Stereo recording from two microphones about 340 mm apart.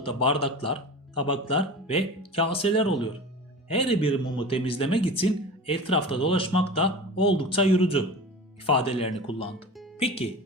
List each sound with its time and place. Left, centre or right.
0.0 s speech: centre